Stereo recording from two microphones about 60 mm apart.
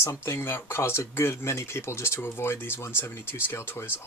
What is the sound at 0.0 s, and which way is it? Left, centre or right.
Speech, left.